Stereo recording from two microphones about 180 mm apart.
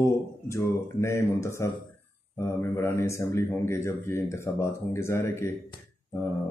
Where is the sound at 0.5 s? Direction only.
15° left (ahead or behind).